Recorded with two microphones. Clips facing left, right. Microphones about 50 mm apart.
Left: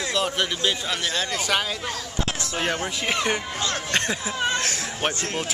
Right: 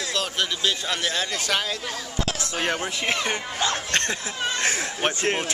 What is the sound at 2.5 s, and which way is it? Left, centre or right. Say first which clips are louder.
Speech: even; centre.